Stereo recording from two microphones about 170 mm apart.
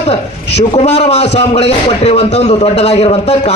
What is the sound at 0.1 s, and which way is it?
A man's voice, 40° left (ahead or behind).